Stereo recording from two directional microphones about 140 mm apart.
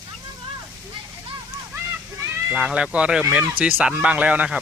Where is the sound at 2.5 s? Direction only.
5° right (ahead or behind).